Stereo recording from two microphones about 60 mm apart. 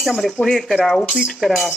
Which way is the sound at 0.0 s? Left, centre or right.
Centre.